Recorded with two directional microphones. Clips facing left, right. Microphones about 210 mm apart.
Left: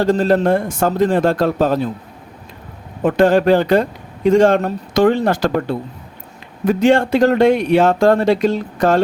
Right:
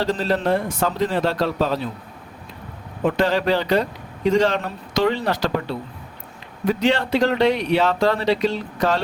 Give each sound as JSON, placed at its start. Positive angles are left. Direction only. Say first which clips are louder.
{"t": 0.0, "sound": "a man's voice", "louder": "left 7 dB", "side_deg": 50}
{"t": 3.0, "sound": "a man's voice", "louder": "left 7 dB", "side_deg": 50}